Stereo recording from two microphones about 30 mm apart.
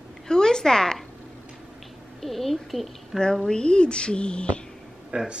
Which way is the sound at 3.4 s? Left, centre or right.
Left.